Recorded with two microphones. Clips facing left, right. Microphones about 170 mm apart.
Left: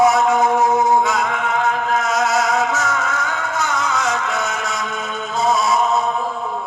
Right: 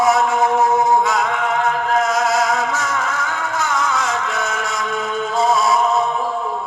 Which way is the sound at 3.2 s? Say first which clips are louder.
Even; 20° left (ahead or behind).